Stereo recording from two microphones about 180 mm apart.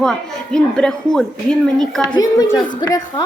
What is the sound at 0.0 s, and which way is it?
Speech, centre (ahead or behind).